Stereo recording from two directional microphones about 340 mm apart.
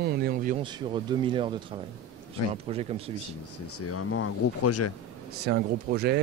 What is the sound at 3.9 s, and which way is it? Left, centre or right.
Speech, left.